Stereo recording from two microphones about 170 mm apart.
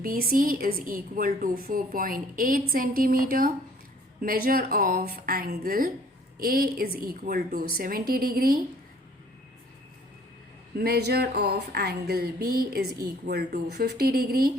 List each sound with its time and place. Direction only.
0.0 s a woman's voice: 60° right (ahead or behind)
10.8 s a woman's voice: 65° right (ahead or behind)